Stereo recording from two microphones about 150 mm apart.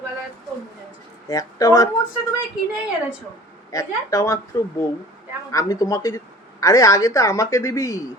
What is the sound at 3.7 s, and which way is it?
Speech, 20° left (ahead or behind).